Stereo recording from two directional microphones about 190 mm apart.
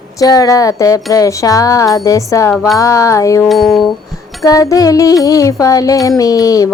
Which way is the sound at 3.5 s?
Centre (ahead or behind).